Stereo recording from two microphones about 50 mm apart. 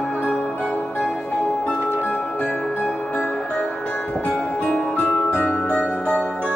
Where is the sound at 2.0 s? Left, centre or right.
Left.